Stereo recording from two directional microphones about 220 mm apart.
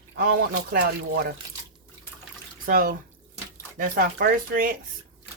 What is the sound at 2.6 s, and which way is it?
Speech, 40° right (ahead or behind).